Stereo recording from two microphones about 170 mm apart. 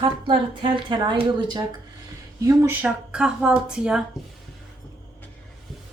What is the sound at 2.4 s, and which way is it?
Speech, 15° right (ahead or behind).